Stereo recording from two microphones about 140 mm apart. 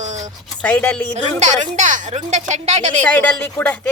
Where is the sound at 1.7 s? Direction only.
60° right (ahead or behind).